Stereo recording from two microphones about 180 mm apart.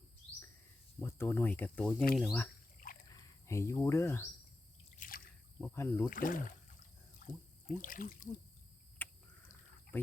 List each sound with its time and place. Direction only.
0.9 s speech: 15° left (ahead or behind); by 2.4 s centre (ahead or behind)
2.8 s a sound: 55° left (ahead or behind)
3.4 s speech: 15° left (ahead or behind)
4.9 s drip: 50° left (ahead or behind)
5.5 s speech: 10° left (ahead or behind)
6.1 s speech: 50° left (ahead or behind)
7.2 s a sound: 45° left (ahead or behind)
7.8 s speech: 50° left (ahead or behind)
9.0 s a sound: 10° left (ahead or behind)
9.9 s speech: 10° left (ahead or behind)